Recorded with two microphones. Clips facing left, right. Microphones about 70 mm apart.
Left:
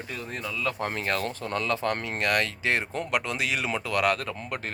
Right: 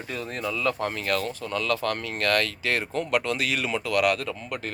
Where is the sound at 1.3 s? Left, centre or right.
Left.